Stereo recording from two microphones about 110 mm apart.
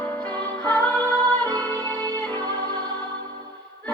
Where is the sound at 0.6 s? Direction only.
15° left (ahead or behind).